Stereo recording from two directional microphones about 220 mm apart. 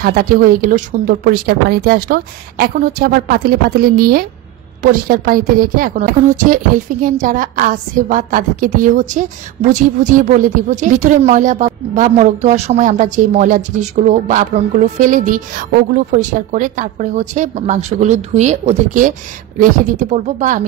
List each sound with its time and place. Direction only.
0.0 s a woman's voice: 40° right (ahead or behind)